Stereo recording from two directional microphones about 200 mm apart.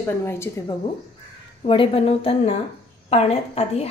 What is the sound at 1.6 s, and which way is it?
A woman's voice, 25° left (ahead or behind).